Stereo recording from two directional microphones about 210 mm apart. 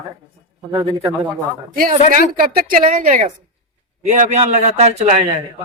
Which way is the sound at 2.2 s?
40° right (ahead or behind).